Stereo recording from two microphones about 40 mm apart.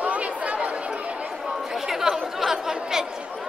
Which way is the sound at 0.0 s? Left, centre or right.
Right.